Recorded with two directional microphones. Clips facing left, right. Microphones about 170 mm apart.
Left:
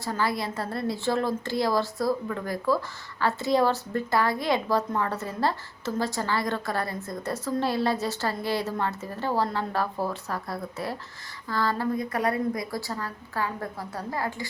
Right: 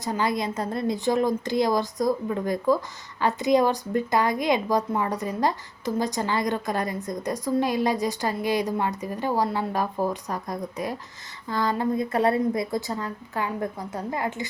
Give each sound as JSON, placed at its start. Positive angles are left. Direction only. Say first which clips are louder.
{"t": 0.0, "sound": "a woman's voice", "louder": "right 2 dB", "side_deg": -20}